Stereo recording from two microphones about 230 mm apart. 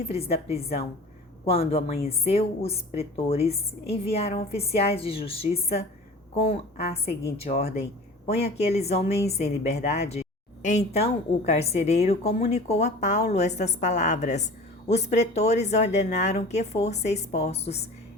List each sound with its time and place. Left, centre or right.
0.0 s a woman's voice: left